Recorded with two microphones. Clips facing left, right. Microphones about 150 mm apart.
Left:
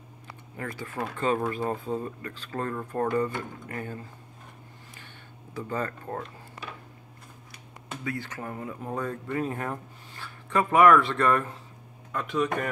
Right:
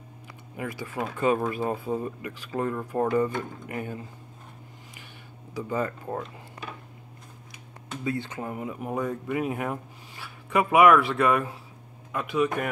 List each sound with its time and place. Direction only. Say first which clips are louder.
0.6 s speech: right 2 dB; 10° right (ahead or behind)
5.5 s speech: right 3 dB; 15° right (ahead or behind)
8.0 s speech: right 4 dB; 25° right (ahead or behind)